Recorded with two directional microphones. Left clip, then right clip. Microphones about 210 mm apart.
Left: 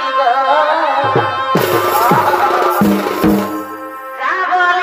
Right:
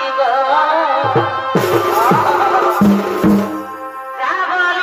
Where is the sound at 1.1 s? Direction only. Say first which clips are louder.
Left 1 dB; 55° left (ahead or behind).